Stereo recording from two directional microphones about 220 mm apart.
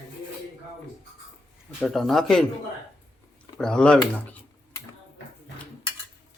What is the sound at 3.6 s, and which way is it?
Speech, 5° left (ahead or behind).